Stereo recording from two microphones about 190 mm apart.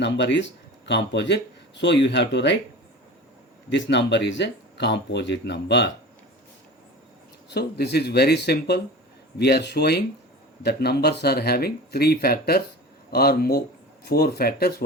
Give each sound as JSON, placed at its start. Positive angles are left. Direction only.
{"t": 0.0, "sound": "speech", "side_deg": 70}
{"t": 3.7, "sound": "speech", "side_deg": 70}
{"t": 7.5, "sound": "speech", "side_deg": 60}